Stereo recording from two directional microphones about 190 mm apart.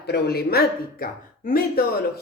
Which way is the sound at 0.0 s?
55° left (ahead or behind).